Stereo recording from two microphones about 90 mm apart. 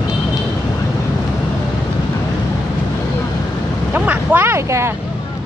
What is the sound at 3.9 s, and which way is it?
Speech, 20° right (ahead or behind).